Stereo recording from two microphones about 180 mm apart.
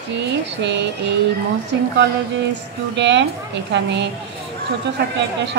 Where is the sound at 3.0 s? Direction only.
80° right.